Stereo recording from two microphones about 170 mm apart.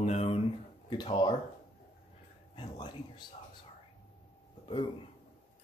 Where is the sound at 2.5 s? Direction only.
25° left (ahead or behind).